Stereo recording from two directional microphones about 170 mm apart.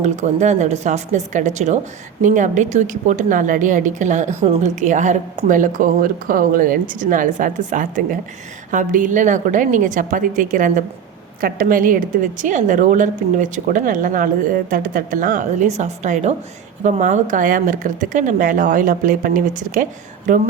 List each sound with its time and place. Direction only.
0.0 s a woman's voice: 45° right (ahead or behind)